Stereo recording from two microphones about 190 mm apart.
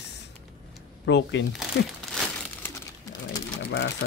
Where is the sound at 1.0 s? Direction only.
70° left (ahead or behind).